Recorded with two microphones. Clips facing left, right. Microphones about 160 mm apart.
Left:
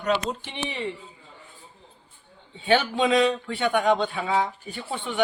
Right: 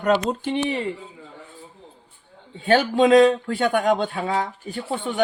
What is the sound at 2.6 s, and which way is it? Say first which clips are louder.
A man's voice: right 5 dB; 45° right (ahead or behind).